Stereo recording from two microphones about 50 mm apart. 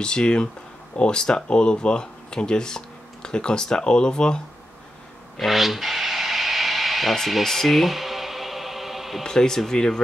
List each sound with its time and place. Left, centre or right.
0.0 s speech: centre
5.4 s a sound: centre
9.2 s speech: centre